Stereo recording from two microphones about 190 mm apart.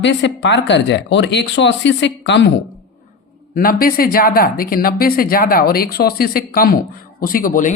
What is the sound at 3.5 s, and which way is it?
Speech, 50° left (ahead or behind).